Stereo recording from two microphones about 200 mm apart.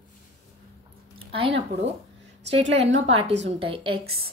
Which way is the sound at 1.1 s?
25° right (ahead or behind).